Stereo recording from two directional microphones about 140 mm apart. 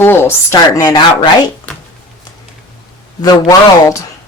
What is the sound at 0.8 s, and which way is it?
Speech, 30° left (ahead or behind).